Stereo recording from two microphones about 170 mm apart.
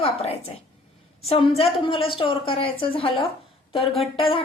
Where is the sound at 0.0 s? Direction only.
35° left (ahead or behind).